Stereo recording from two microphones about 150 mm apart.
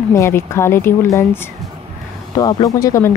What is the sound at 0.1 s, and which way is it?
Speech, 20° left (ahead or behind).